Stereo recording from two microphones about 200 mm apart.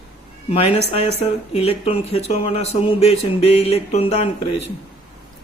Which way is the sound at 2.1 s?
30° left (ahead or behind).